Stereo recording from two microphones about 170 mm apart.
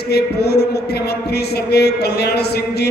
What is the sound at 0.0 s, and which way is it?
A man's voice, 70° left (ahead or behind).